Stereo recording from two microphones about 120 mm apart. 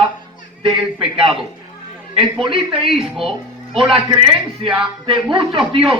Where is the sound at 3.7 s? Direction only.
50° right (ahead or behind).